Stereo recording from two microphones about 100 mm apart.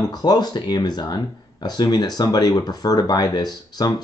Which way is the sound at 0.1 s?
45° left (ahead or behind).